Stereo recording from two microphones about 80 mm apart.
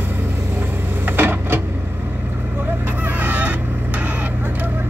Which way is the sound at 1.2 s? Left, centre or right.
Right.